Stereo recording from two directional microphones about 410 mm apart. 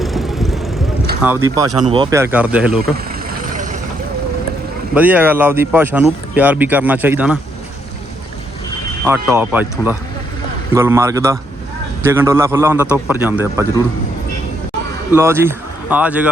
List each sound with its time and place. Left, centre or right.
0.0 s vehicle: centre
1.2 s speech: centre
3.2 s vehicle: centre
4.9 s speech: centre
9.0 s a man's voice: centre
15.1 s speech: centre